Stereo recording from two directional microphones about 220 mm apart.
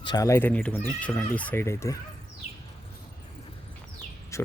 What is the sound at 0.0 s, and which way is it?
Speech, 20° left (ahead or behind).